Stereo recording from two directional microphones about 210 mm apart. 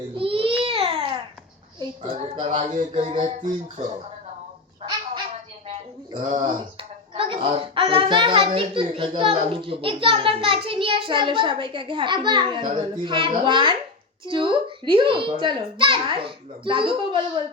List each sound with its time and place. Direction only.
0.2 s baby cry: 25° right (ahead or behind)
0.6 s babbling: 25° right (ahead or behind)
1.8 s a child's voice: 25° right (ahead or behind)
2.6 s speech: 40° right (ahead or behind)
2.9 s a child's voice: 25° right (ahead or behind)
3.2 s speech: 35° right (ahead or behind)
6.1 s a child's voice: 30° right (ahead or behind)